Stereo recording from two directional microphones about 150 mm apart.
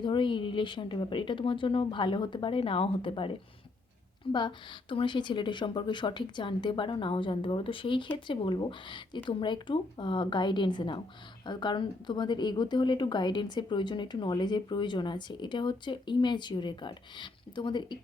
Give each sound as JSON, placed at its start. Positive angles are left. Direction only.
{"t": 0.0, "sound": "a woman's voice", "side_deg": 30}